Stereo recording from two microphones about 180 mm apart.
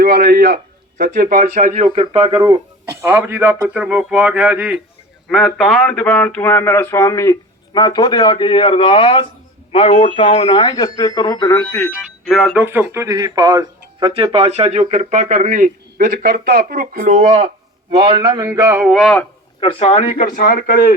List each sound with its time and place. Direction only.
0.0 s a man's voice: 60° right (ahead or behind); by 11.9 s 10° left (ahead or behind)
12.3 s speech: centre (ahead or behind); by 14.1 s 20° right (ahead or behind)
14.1 s speech: 35° right (ahead or behind); by 19.2 s centre (ahead or behind)
19.5 s speech: 35° left (ahead or behind); by 20.9 s 55° left (ahead or behind)